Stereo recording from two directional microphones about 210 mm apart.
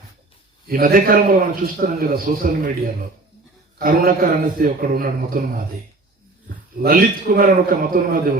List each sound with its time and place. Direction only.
0.7 s a man's voice: 40° right (ahead or behind)
6.8 s a man's voice: 45° right (ahead or behind)